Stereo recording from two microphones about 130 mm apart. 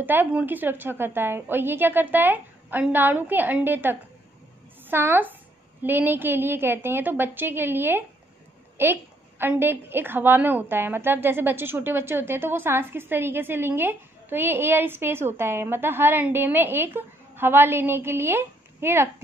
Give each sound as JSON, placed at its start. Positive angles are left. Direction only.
{"t": 0.0, "sound": "a woman's voice", "side_deg": -15}